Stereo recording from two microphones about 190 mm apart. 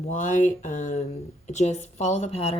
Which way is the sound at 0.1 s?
40° left (ahead or behind).